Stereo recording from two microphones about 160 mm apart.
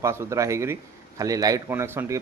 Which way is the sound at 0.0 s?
15° right (ahead or behind).